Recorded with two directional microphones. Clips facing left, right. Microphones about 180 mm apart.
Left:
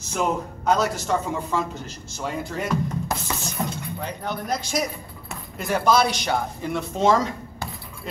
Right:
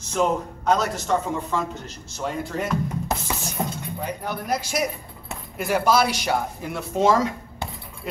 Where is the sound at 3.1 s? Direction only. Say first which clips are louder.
Right 1 dB; 20° right (ahead or behind).